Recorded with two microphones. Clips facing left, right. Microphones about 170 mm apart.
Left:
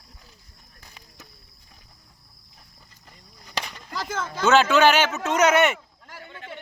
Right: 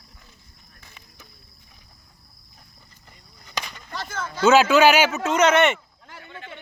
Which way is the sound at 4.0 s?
90° left.